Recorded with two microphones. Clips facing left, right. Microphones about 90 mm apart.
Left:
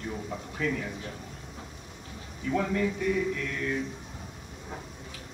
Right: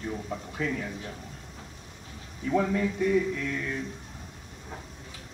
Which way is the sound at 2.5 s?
5° right (ahead or behind).